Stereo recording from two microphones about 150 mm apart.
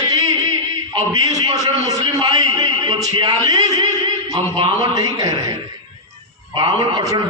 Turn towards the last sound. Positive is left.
turn(degrees=-25)  # may be behind; listen again after turning